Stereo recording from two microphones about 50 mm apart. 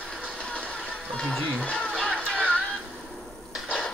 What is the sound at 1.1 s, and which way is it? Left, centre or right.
Speech, centre.